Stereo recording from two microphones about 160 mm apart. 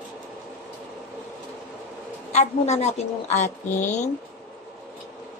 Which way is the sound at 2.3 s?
45° left (ahead or behind).